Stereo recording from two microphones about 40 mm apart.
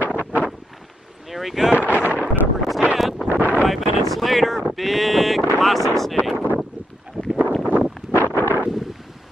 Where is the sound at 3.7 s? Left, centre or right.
Centre.